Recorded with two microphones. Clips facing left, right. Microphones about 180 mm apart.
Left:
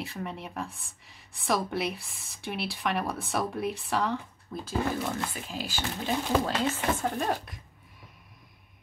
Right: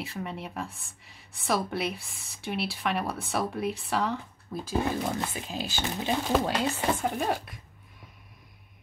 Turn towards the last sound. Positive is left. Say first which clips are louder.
# right 1 dB
turn(degrees=-5)  # may be behind; listen again after turning